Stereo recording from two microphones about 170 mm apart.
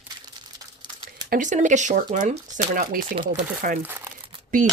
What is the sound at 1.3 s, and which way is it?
Speech, 45° right (ahead or behind).